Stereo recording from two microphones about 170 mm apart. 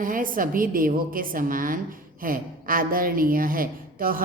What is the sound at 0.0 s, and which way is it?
A woman's voice, 55° right (ahead or behind).